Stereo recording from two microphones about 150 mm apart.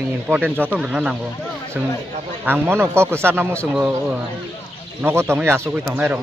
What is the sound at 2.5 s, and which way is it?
Speech, 15° right (ahead or behind).